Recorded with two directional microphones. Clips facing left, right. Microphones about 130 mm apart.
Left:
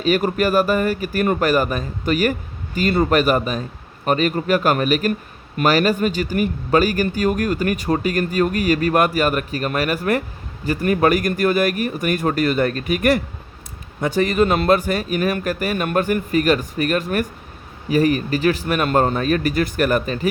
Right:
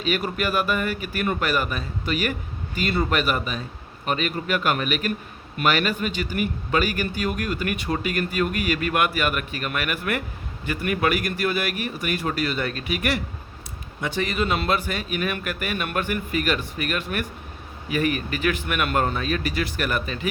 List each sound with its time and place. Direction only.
0.0 s speech: 40° left (ahead or behind)